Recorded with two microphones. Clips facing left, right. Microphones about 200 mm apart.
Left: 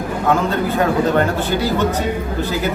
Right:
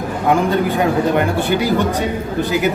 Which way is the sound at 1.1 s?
15° right (ahead or behind).